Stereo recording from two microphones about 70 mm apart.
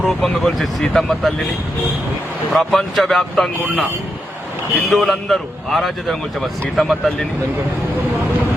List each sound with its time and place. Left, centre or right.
0.0 s speech: centre
2.5 s speech: centre
4.9 s speech: centre